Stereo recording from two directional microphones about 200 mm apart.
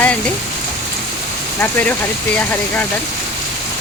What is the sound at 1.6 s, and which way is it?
Speech, 10° left (ahead or behind).